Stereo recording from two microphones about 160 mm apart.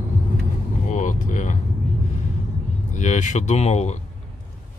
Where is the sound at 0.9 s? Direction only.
50° left (ahead or behind).